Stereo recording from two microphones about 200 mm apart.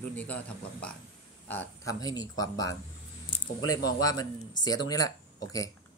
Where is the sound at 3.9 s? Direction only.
20° left (ahead or behind).